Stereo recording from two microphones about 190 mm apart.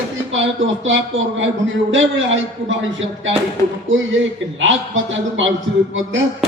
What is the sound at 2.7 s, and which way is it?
A man's voice, 85° right.